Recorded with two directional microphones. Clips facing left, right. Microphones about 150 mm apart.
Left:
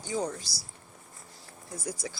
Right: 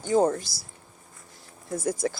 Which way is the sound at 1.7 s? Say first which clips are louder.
Right 10 dB; 50° right (ahead or behind).